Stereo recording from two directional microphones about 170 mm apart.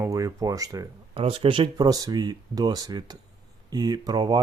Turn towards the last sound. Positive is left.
turn(degrees=-25)  # may be behind; listen again after turning